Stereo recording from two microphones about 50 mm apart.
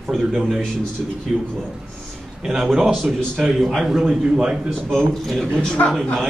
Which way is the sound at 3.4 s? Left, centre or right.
Centre.